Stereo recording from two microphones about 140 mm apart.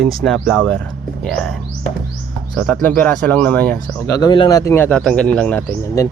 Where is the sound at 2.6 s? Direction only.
5° left (ahead or behind).